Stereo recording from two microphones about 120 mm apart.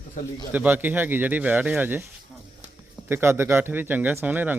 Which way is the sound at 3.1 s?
20° right (ahead or behind).